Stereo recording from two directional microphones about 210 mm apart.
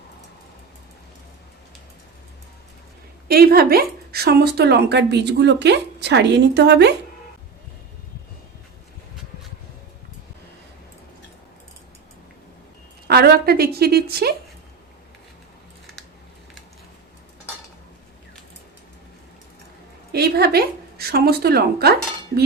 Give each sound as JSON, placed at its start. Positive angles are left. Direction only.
{"t": 3.2, "sound": "a woman's voice", "side_deg": -45}
{"t": 13.1, "sound": "a woman's voice", "side_deg": -50}
{"t": 20.1, "sound": "a woman's voice", "side_deg": -50}